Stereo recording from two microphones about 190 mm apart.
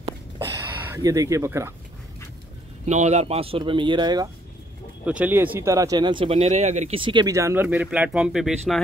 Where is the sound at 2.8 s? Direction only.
35° right (ahead or behind).